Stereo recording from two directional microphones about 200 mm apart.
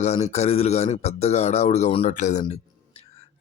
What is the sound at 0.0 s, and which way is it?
A man's voice, 35° left (ahead or behind).